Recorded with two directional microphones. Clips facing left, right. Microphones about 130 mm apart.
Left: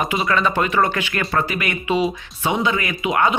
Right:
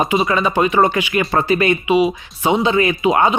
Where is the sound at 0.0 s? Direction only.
25° right (ahead or behind).